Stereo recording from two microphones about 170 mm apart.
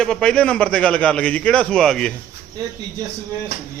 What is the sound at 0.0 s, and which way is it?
A man's voice, 5° left (ahead or behind).